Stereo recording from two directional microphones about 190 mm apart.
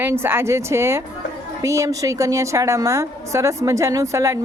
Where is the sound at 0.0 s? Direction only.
10° right (ahead or behind).